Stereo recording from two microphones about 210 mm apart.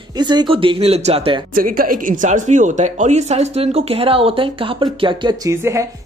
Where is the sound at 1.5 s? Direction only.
40° right (ahead or behind); by 5.9 s 15° right (ahead or behind).